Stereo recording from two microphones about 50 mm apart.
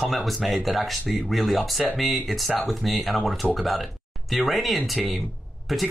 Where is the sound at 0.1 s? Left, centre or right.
Centre.